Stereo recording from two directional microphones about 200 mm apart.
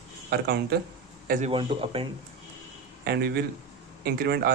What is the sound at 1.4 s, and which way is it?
Speech, 25° right (ahead or behind).